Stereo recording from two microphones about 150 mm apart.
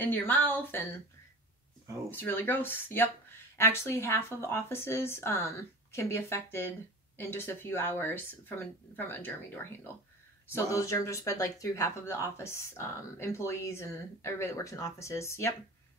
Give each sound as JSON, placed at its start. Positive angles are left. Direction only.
{"t": 0.0, "sound": "speech", "side_deg": 15}
{"t": 2.0, "sound": "speech", "side_deg": 15}